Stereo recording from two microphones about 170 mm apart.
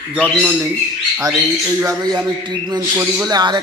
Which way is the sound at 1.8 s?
20° right (ahead or behind).